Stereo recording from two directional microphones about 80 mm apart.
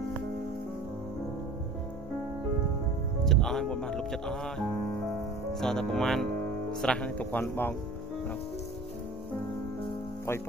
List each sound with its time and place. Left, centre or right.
3.3 s speech: centre; by 7.7 s left